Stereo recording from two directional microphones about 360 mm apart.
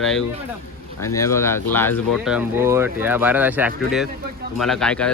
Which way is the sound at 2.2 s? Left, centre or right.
Centre.